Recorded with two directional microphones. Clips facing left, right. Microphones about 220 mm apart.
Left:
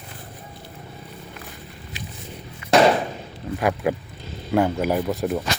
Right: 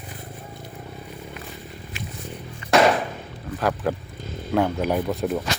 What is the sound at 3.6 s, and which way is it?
Speech, 10° left (ahead or behind).